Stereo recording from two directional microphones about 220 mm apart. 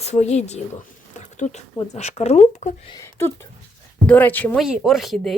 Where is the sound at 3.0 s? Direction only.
10° left (ahead or behind).